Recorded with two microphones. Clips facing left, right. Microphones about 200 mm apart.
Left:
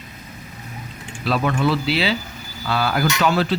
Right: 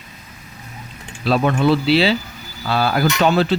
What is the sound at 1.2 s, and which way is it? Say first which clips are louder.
Speech: right 4 dB; 30° right (ahead or behind).